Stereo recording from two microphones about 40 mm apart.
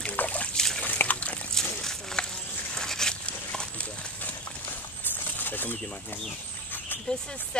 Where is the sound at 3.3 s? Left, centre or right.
Left.